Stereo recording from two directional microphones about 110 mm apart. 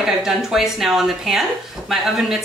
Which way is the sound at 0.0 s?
5° right (ahead or behind).